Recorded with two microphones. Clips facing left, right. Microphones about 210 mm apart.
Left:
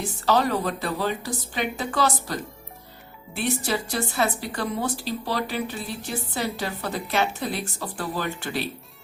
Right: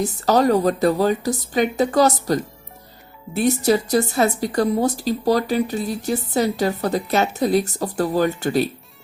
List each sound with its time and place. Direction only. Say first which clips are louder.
0.0 s a woman's voice: right 5 dB; 40° right (ahead or behind)